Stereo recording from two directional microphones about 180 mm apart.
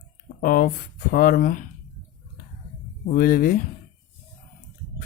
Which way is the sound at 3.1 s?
50° left (ahead or behind).